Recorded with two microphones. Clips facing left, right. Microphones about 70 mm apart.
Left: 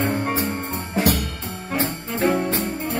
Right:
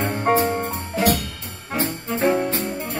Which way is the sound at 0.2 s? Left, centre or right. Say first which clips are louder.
Right 5 dB; right.